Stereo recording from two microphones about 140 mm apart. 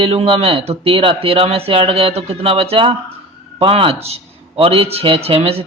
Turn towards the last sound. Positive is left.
turn(degrees=-45)  # may be behind; listen again after turning